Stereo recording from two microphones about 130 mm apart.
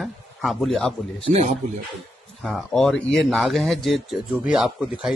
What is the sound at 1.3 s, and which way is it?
Speech, 60° right (ahead or behind).